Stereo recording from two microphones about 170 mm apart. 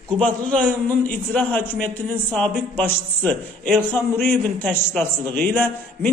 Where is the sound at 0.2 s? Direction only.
5° left (ahead or behind).